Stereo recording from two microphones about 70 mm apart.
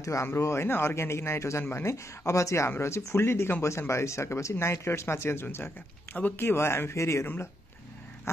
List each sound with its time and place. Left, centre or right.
0.0 s speech: left